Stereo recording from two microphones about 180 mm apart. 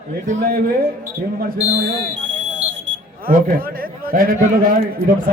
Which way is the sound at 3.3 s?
50° right (ahead or behind).